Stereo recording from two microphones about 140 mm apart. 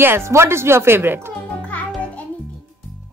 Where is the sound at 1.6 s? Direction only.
5° left (ahead or behind).